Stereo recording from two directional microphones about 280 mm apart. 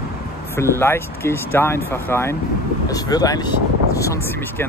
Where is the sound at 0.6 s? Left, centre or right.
Centre.